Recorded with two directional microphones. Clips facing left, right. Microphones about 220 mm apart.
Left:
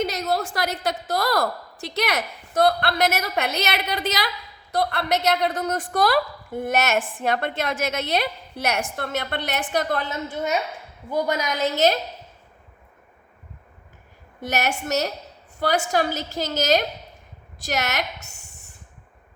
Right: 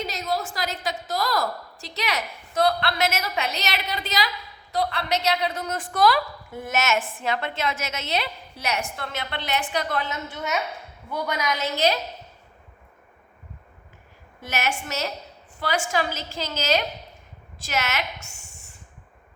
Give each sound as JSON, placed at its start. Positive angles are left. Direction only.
{"t": 0.0, "sound": "a woman's voice", "side_deg": 50}
{"t": 2.6, "sound": "a woman's voice", "side_deg": 50}
{"t": 14.4, "sound": "a woman's voice", "side_deg": 40}